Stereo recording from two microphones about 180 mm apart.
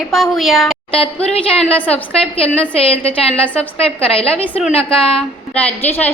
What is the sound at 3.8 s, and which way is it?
A woman's voice, 30° left (ahead or behind).